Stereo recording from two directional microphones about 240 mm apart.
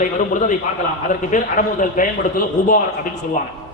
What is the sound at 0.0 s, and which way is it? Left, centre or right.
A man's voice, left.